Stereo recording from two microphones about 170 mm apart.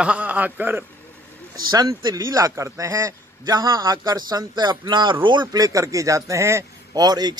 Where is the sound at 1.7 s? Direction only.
25° right (ahead or behind).